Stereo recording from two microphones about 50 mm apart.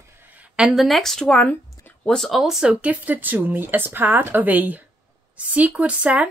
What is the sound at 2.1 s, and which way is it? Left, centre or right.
Speech, centre.